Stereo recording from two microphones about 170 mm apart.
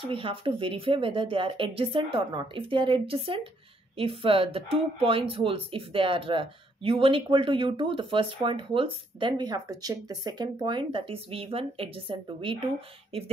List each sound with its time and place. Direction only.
0.0 s speech: 30° right (ahead or behind)